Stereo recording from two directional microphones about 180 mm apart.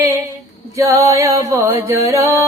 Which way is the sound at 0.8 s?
15° right (ahead or behind).